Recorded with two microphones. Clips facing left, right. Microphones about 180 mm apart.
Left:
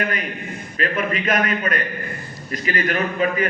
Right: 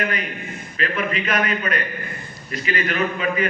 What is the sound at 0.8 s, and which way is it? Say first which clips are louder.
A man's voice: left 1 dB; 45° left (ahead or behind).